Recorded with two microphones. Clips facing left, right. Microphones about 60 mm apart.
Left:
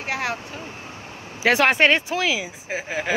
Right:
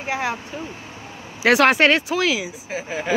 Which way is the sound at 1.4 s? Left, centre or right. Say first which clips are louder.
Right 2 dB; centre.